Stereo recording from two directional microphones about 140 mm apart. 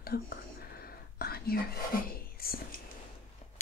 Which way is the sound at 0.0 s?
90° left.